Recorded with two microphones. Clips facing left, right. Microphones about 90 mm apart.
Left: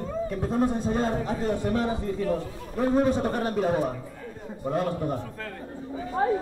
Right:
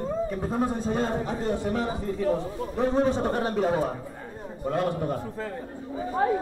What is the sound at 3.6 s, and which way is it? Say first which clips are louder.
Speech: even; centre (ahead or behind).